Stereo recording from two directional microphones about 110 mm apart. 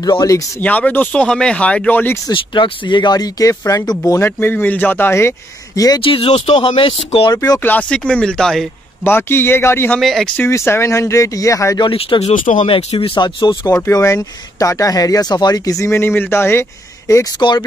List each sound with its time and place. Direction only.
0.0 s speech: 35° left (ahead or behind)
0.6 s speech: 15° left (ahead or behind)
2.3 s speech: 45° left (ahead or behind); by 4.3 s 30° left (ahead or behind)
4.4 s speech: 15° left (ahead or behind)
6.0 s speech: 55° left (ahead or behind)
7.6 s speech: 15° left (ahead or behind)
9.0 s speech: 20° left (ahead or behind)
9.9 s speech: centre (ahead or behind)
10.3 s speech: 20° left (ahead or behind)
11.9 s speech: 60° left (ahead or behind); by 12.6 s 85° left
12.6 s speech: 55° left (ahead or behind)
13.8 s speech: 25° left (ahead or behind)